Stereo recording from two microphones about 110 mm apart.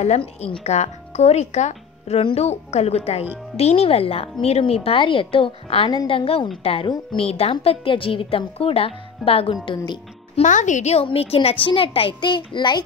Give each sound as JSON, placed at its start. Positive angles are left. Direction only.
{"t": 0.2, "sound": "a child's voice", "side_deg": 55}
{"t": 0.7, "sound": "a woman's voice", "side_deg": 85}
{"t": 10.3, "sound": "speech", "side_deg": 90}
{"t": 11.1, "sound": "a child's voice", "side_deg": 60}